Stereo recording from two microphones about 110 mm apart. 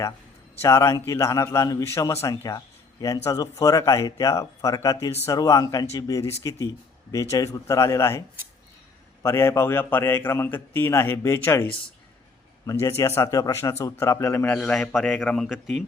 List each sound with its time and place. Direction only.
0.6 s a man's voice: 25° left (ahead or behind)
9.2 s a man's voice: 25° left (ahead or behind)
12.6 s a man's voice: 30° left (ahead or behind)
14.6 s a man's voice: 5° left (ahead or behind)